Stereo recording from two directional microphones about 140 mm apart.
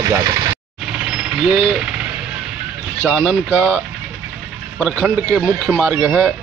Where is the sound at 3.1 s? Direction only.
5° right (ahead or behind).